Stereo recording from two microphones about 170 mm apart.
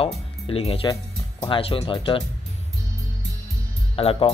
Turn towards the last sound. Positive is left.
turn(degrees=35)  # may be behind; listen again after turning